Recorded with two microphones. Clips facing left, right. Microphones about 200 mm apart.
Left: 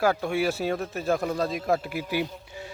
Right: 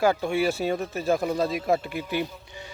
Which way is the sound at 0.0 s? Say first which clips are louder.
Right 1 dB; centre (ahead or behind).